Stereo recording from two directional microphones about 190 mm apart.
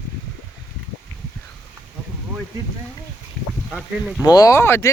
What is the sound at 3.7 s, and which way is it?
Speech, 5° right (ahead or behind).